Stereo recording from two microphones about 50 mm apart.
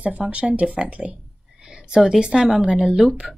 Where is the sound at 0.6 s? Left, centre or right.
Right.